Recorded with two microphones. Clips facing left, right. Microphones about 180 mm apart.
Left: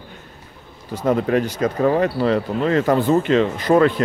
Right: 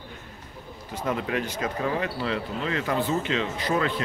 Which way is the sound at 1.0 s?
40° left (ahead or behind).